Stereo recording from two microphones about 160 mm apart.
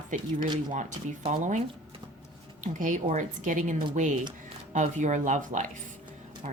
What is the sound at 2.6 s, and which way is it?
Speech, 55° right (ahead or behind).